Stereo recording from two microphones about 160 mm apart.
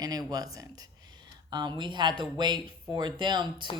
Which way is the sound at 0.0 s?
25° right (ahead or behind).